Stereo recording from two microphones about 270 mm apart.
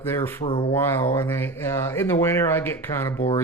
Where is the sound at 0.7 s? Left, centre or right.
Centre.